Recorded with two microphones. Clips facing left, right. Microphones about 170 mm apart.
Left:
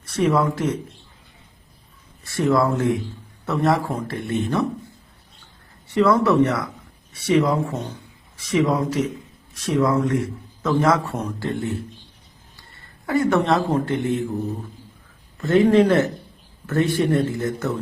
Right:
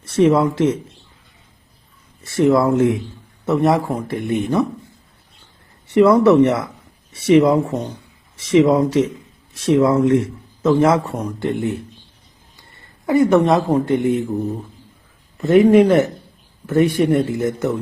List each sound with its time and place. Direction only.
0.0 s speech: 25° right (ahead or behind)
2.2 s a man's voice: 25° right (ahead or behind)
5.9 s a man's voice: 20° right (ahead or behind)
13.1 s a man's voice: 20° right (ahead or behind)
15.4 s a man's voice: 20° right (ahead or behind)